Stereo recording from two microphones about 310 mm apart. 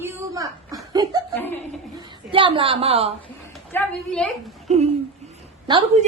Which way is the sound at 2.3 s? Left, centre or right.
Centre.